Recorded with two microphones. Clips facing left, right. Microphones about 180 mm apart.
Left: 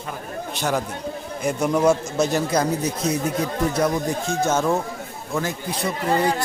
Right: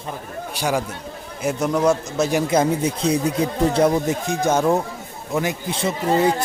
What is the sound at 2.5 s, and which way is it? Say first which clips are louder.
A man's voice: right 3 dB; 25° right (ahead or behind).